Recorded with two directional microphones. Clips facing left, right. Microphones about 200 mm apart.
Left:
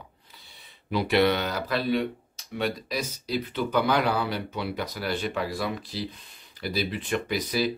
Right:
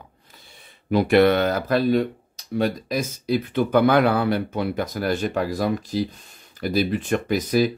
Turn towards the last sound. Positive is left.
turn(degrees=-45)  # may be behind; listen again after turning